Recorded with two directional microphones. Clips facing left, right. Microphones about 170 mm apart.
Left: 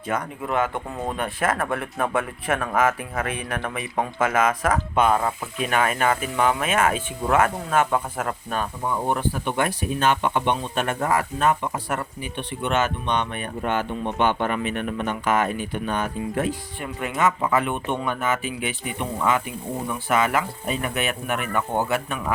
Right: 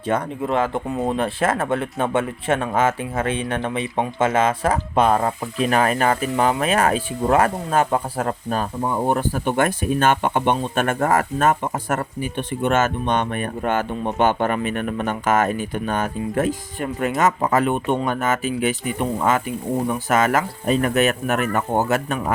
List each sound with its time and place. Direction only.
0.0 s speech: 30° right (ahead or behind)